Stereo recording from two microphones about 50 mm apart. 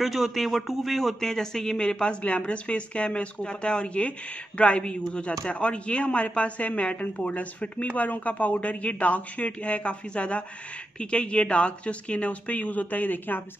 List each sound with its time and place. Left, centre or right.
0.0 s a man's voice: centre; by 13.4 s left